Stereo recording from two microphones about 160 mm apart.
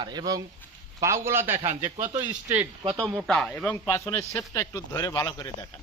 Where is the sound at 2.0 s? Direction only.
25° right (ahead or behind).